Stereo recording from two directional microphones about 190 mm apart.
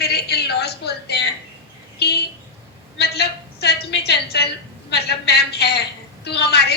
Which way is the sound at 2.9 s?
60° left (ahead or behind).